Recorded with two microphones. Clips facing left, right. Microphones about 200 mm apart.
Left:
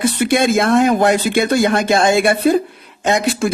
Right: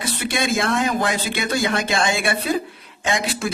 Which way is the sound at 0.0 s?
50° left (ahead or behind).